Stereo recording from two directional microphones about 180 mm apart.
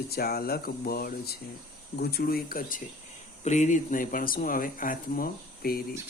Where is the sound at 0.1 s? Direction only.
60° left (ahead or behind).